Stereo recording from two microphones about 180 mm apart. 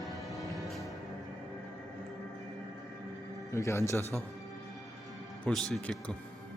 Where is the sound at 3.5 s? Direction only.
15° left (ahead or behind).